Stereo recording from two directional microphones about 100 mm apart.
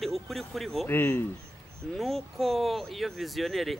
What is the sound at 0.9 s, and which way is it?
Speech, 20° left (ahead or behind).